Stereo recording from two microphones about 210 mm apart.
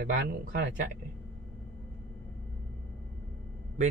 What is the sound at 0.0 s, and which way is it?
Speech, 45° right (ahead or behind).